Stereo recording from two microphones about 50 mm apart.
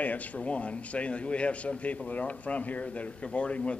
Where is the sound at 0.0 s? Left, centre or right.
Left.